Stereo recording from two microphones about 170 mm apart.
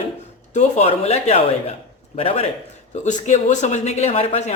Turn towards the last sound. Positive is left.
turn(degrees=40)  # may be behind; listen again after turning